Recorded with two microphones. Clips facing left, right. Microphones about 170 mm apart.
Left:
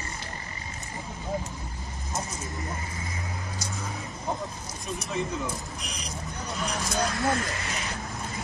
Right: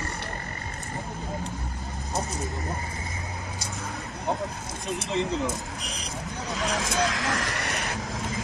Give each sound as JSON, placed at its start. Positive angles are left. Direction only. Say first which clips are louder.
{"t": 4.8, "sound": "speech", "louder": "right 3 dB", "side_deg": -20}
{"t": 6.4, "sound": "speech", "louder": "right 3 dB", "side_deg": -70}